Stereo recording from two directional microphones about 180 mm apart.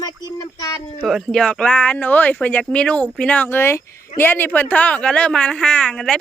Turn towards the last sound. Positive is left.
turn(degrees=5)  # may be behind; listen again after turning